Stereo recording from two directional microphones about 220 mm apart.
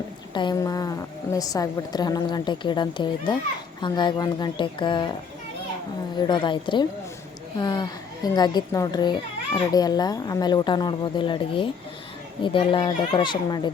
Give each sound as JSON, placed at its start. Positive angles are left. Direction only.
{"t": 0.3, "sound": "a woman's voice", "side_deg": 20}
{"t": 6.1, "sound": "a woman's voice", "side_deg": 20}